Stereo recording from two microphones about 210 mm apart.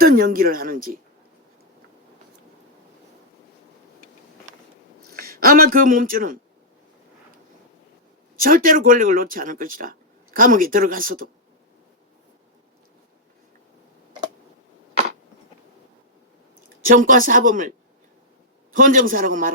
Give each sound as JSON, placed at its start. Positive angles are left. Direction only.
{"t": 0.0, "sound": "speech", "side_deg": -45}
{"t": 5.0, "sound": "speech", "side_deg": -45}
{"t": 8.4, "sound": "speech", "side_deg": -40}
{"t": 16.8, "sound": "speech", "side_deg": -40}